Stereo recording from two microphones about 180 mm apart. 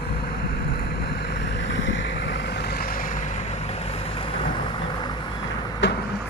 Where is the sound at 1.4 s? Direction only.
80° left; by 3.2 s 50° left (ahead or behind).